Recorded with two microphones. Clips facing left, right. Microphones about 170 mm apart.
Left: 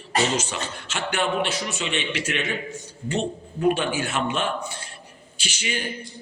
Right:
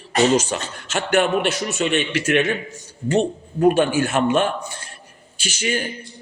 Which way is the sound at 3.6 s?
45° right (ahead or behind).